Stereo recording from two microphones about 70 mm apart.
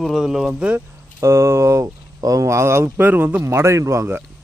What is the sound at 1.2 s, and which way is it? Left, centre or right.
Speech, right.